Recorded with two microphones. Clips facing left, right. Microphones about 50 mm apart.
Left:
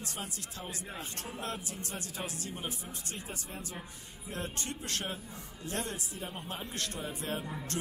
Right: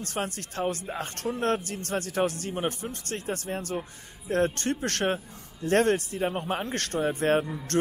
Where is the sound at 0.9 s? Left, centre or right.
Right.